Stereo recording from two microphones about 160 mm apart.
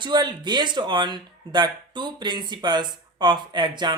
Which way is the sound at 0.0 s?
30° right (ahead or behind).